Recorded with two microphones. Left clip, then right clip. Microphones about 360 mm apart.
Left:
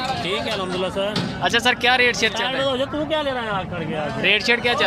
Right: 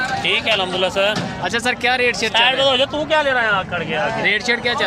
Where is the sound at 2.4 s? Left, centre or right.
Right.